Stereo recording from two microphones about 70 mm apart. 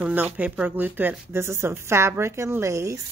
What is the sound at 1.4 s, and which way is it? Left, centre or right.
A woman's voice, right.